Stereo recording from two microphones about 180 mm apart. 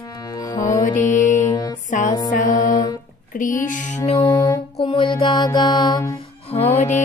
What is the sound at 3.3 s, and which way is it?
Speech, 45° left (ahead or behind).